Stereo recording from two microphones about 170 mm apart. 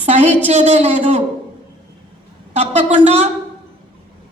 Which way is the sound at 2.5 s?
40° right (ahead or behind).